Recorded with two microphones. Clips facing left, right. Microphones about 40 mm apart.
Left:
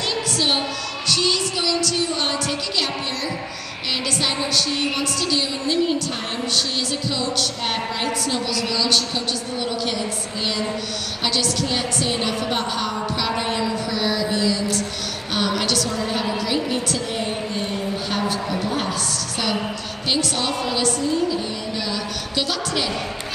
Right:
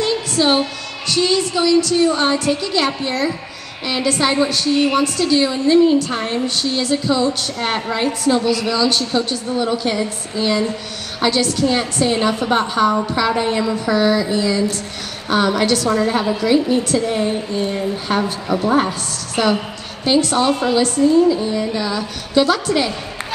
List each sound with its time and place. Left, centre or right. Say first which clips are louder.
0.0 s music: right 5 dB; right
1.0 s a woman's voice: right 5 dB; right
11.2 s a woman's voice: right 7 dB; right
18.5 s a woman's voice: right 7 dB; right